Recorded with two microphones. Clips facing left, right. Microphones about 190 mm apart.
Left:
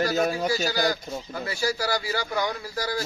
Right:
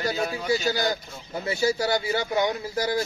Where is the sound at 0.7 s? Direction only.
25° right (ahead or behind).